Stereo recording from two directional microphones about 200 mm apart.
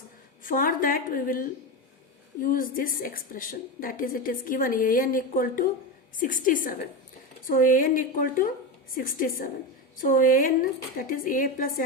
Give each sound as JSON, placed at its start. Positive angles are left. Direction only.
{"t": 0.4, "sound": "a woman's voice", "side_deg": 45}